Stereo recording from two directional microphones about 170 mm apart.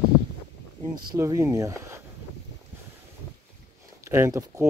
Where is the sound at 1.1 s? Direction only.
20° right (ahead or behind).